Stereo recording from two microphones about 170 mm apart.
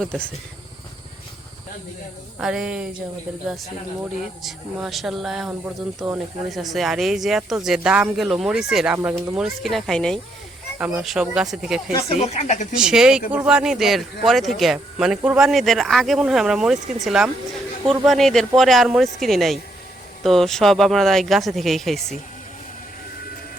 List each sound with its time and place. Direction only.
0.0 s speech: 5° left (ahead or behind)
2.4 s speech: 5° right (ahead or behind)
4.4 s speech: centre (ahead or behind)
12.0 s speech: 40° left (ahead or behind)
12.7 s speech: 5° right (ahead or behind)